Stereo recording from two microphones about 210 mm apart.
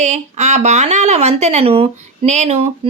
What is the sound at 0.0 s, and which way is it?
Speech, 30° right (ahead or behind).